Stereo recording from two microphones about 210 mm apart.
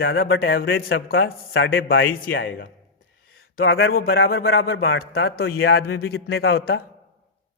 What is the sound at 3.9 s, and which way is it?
Speech, 50° left (ahead or behind).